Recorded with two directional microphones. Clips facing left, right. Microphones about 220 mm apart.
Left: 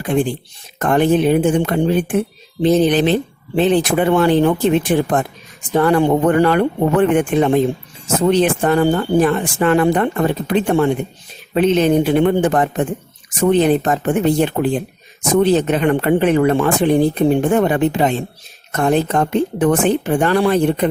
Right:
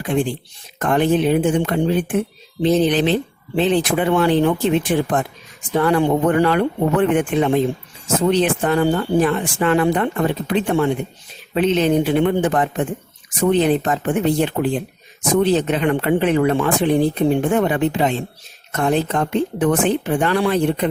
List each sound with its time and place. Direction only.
0.0 s speech: 45° left (ahead or behind)